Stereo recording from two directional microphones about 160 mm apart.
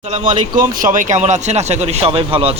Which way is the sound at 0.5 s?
55° right (ahead or behind).